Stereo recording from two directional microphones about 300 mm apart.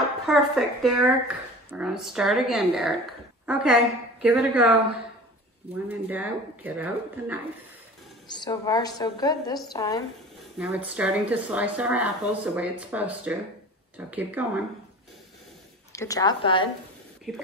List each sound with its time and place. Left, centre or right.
0.3 s speech: centre
5.9 s speech: centre
8.4 s a woman's voice: centre
10.6 s speech: centre
15.9 s a woman's voice: centre